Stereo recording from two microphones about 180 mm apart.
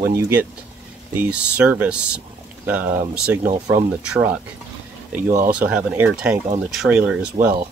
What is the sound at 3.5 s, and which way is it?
Speech, 20° right (ahead or behind).